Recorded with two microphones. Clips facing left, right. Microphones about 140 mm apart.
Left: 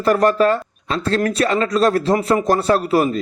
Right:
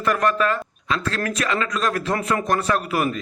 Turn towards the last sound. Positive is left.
turn(degrees=30)  # may be behind; listen again after turning